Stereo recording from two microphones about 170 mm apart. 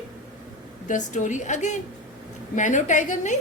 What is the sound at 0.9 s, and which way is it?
A woman's voice, 45° left (ahead or behind).